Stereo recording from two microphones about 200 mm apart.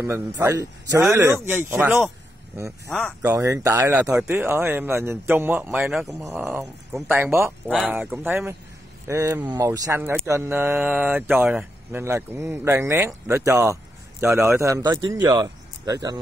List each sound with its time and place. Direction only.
0.4 s speech: 15° right (ahead or behind)
3.2 s speech: 15° right (ahead or behind)